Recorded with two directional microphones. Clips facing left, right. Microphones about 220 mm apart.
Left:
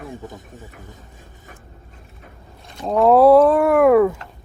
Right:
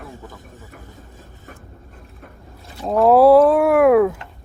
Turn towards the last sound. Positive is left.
turn(degrees=0)  # may be behind; listen again after turning